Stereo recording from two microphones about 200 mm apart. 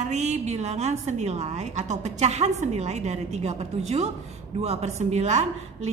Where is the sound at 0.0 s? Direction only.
35° right (ahead or behind).